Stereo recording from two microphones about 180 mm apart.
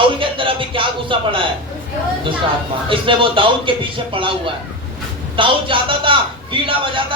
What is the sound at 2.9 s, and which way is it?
A man's voice, 30° right (ahead or behind).